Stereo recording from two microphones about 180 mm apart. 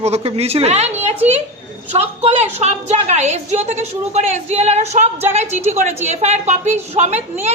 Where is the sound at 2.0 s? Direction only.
35° right (ahead or behind).